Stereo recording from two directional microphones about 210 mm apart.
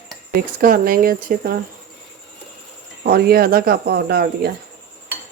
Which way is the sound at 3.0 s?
45° right (ahead or behind).